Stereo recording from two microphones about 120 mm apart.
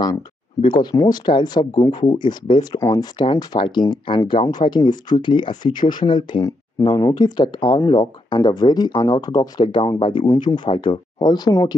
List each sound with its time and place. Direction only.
0.6 s speech: 40° left (ahead or behind)
6.9 s speech: 30° left (ahead or behind)